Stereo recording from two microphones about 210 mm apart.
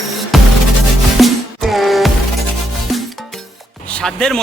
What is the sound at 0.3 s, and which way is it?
Music, centre (ahead or behind).